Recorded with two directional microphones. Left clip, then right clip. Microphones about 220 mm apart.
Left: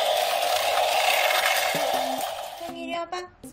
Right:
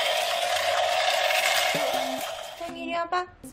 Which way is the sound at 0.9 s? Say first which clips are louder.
Left 2 dB; 45° left (ahead or behind).